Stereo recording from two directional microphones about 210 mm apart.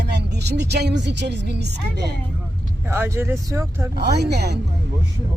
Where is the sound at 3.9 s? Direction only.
50° right (ahead or behind).